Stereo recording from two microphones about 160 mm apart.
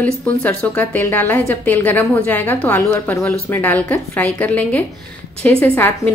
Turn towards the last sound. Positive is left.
turn(degrees=10)  # may be behind; listen again after turning